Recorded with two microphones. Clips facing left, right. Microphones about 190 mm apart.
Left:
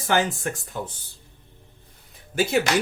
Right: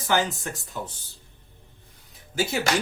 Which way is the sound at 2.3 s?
55° left (ahead or behind).